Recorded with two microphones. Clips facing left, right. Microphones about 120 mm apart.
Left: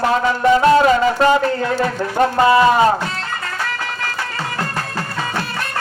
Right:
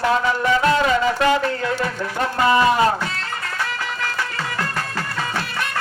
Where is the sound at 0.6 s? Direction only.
35° left (ahead or behind).